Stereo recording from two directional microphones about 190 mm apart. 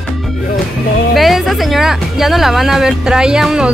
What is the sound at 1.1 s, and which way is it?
Speech, centre (ahead or behind).